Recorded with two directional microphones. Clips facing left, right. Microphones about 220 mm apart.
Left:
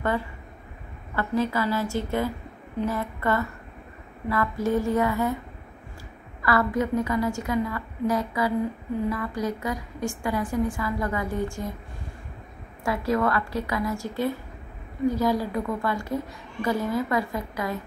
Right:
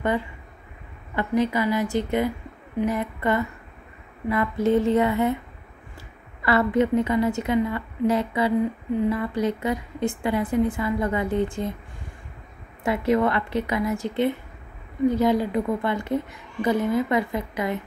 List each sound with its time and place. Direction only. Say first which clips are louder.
1.1 s a woman's voice: right 3 dB; 20° right (ahead or behind)
6.4 s a woman's voice: right 3 dB; 25° right (ahead or behind)
12.8 s a woman's voice: right 3 dB; 20° right (ahead or behind)